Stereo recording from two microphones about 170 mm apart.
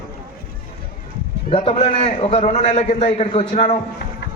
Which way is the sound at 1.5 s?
35° left (ahead or behind).